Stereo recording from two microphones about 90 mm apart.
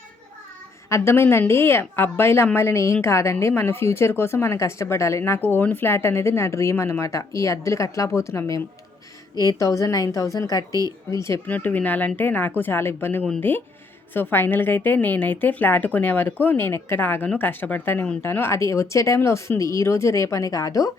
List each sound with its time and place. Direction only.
0.9 s a woman's voice: 30° left (ahead or behind)
10.7 s speech: 40° right (ahead or behind)
11.1 s speech: 30° left (ahead or behind)
11.4 s a woman's voice: 15° left (ahead or behind); by 20.9 s 40° left (ahead or behind)